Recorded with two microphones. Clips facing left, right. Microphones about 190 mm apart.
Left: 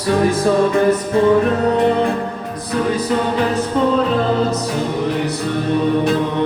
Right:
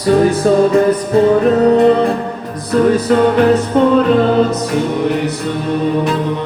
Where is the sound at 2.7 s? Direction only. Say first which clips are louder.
Right 7 dB; 65° right (ahead or behind).